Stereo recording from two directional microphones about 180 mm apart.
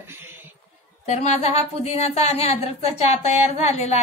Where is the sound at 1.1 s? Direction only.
35° left (ahead or behind).